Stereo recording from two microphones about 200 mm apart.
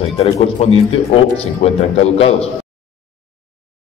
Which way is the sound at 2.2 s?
30° left (ahead or behind).